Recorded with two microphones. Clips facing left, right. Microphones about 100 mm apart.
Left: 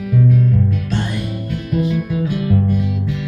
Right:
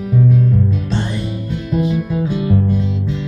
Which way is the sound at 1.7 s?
20° right (ahead or behind).